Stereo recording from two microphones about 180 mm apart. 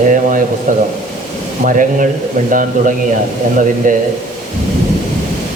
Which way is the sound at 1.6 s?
50° right (ahead or behind).